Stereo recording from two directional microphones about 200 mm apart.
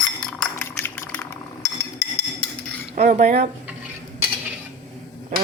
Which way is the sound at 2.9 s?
35° right (ahead or behind).